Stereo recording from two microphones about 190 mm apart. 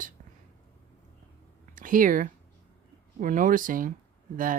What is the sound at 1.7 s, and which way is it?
Speech, 45° right (ahead or behind).